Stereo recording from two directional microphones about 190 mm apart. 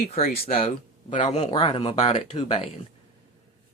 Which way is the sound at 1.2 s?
30° left (ahead or behind).